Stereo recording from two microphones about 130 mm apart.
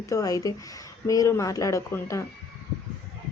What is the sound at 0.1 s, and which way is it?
A woman's voice, 25° left (ahead or behind).